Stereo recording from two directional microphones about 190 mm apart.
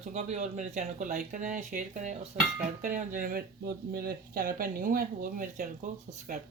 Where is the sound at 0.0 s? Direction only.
35° right (ahead or behind).